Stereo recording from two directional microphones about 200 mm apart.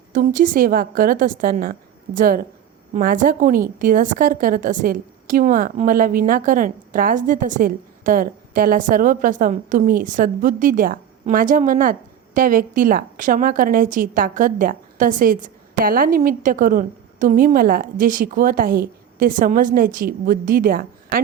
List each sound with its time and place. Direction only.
0.1 s a woman's voice: 40° right (ahead or behind)